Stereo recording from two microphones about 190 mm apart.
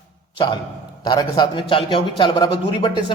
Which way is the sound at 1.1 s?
20° left (ahead or behind).